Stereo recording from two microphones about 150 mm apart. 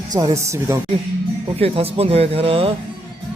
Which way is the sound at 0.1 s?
25° right (ahead or behind).